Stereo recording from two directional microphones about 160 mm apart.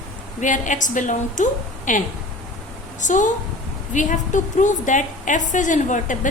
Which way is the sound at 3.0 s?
50° left (ahead or behind).